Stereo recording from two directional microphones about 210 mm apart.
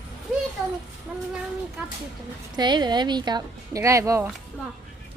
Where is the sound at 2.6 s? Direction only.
20° right (ahead or behind).